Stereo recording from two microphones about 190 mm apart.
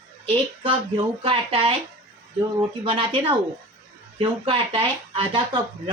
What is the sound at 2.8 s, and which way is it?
Speech, 30° right (ahead or behind).